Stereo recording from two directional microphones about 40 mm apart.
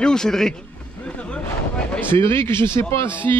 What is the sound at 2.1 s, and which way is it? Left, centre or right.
Speech, left.